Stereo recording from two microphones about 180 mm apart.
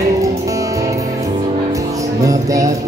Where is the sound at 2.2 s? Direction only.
20° right (ahead or behind).